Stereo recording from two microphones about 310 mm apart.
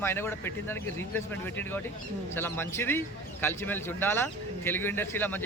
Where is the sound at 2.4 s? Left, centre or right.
Centre.